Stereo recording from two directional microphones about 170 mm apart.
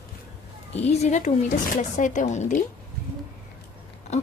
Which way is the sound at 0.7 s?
40° left (ahead or behind).